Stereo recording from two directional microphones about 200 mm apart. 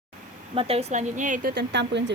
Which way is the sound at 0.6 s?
30° right (ahead or behind).